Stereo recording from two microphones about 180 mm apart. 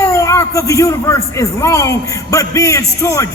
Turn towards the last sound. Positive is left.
turn(degrees=15)  # may be behind; listen again after turning